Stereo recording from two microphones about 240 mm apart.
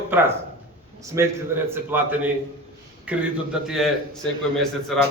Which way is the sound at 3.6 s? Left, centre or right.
Centre.